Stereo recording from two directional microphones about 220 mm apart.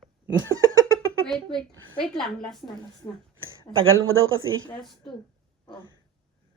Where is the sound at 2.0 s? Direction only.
Centre (ahead or behind).